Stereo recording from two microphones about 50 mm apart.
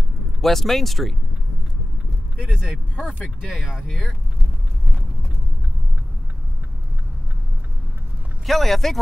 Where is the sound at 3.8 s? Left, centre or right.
Centre.